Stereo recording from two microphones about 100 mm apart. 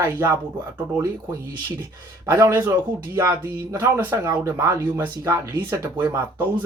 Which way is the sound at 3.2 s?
30° right (ahead or behind).